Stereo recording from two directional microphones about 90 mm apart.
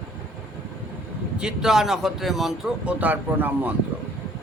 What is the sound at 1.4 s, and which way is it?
Speech, 5° right (ahead or behind).